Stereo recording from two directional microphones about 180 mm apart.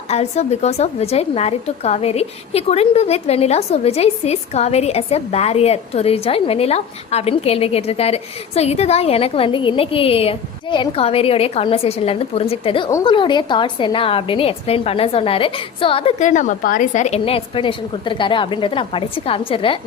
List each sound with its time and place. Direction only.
0.1 s speech: 35° left (ahead or behind)